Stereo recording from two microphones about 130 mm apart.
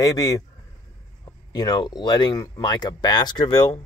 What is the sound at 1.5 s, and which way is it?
Speech, 30° left (ahead or behind).